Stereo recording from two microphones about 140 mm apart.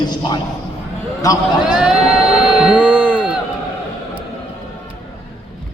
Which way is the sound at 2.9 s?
10° left (ahead or behind).